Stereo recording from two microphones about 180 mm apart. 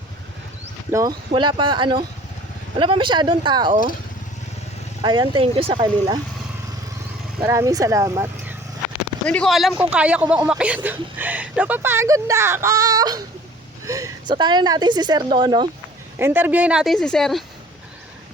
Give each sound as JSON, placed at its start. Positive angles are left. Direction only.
{"t": 0.9, "sound": "a woman's voice", "side_deg": -15}
{"t": 5.0, "sound": "a woman's voice", "side_deg": -25}
{"t": 7.4, "sound": "speech", "side_deg": -15}
{"t": 9.2, "sound": "a woman's voice", "side_deg": 5}
{"t": 16.1, "sound": "a woman's voice", "side_deg": -10}